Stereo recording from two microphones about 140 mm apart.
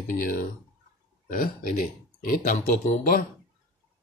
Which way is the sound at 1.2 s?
90° left.